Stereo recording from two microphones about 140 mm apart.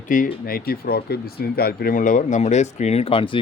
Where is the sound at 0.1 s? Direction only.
65° left (ahead or behind).